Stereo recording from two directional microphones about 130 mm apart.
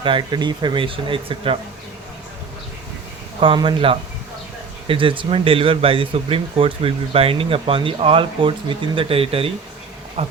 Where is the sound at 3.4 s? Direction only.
40° right (ahead or behind).